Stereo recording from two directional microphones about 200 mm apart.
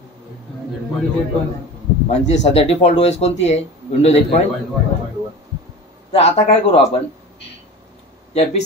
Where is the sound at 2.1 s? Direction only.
35° left (ahead or behind).